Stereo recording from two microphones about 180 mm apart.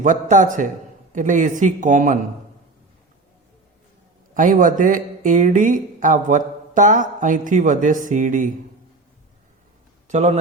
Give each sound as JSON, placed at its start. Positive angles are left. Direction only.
{"t": 0.0, "sound": "speech", "side_deg": -45}
{"t": 4.4, "sound": "speech", "side_deg": -45}
{"t": 10.1, "sound": "a man's voice", "side_deg": -40}